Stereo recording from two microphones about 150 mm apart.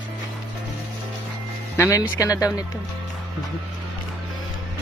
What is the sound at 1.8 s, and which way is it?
Speech, 20° left (ahead or behind).